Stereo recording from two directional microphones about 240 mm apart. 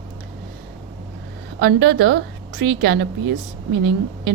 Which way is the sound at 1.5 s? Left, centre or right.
Right.